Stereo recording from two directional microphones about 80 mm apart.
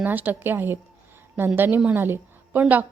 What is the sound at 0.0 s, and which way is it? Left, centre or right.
A woman's voice, right.